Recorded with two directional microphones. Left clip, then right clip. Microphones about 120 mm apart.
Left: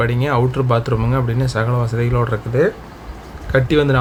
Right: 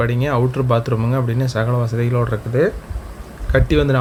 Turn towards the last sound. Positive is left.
turn(degrees=-10)  # may be behind; listen again after turning